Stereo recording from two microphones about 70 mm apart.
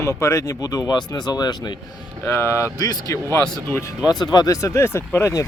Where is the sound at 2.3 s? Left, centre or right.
Left.